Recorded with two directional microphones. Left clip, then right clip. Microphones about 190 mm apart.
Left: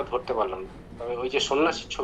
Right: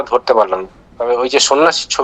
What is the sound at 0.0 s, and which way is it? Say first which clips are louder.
A man's voice: right 15 dB; 65° right (ahead or behind).